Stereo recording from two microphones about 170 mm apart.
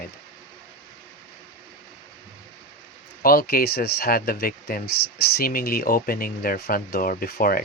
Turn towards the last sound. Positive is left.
turn(degrees=55)  # may be behind; listen again after turning